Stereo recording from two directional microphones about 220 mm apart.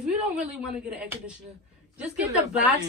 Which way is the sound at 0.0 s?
5° right (ahead or behind).